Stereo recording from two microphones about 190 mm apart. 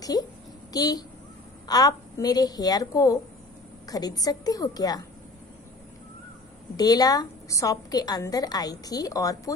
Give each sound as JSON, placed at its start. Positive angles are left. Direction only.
{"t": 0.7, "sound": "a woman's voice", "side_deg": 20}
{"t": 6.8, "sound": "a woman's voice", "side_deg": 20}